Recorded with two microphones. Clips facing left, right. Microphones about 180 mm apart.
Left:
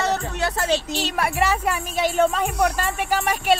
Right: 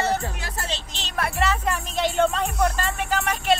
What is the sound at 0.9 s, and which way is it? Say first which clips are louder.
Speech: left 5 dB; 10° left (ahead or behind).